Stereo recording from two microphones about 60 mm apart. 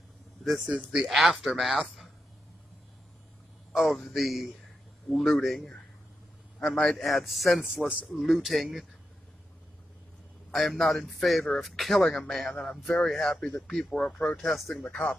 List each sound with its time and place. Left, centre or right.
0.4 s speech: centre
3.7 s speech: centre
10.5 s speech: centre
14.5 s speech: centre
14.8 s speech: centre